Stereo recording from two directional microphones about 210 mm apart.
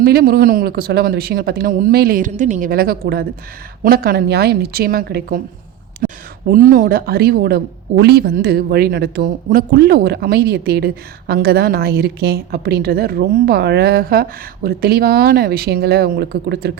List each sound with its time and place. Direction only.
0.0 s speech: 45° right (ahead or behind)
6.0 s a sound: 40° right (ahead or behind)
6.5 s speech: 40° right (ahead or behind)